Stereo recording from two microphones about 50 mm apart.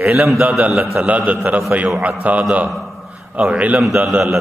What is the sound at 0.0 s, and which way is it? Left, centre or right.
A man's voice, right.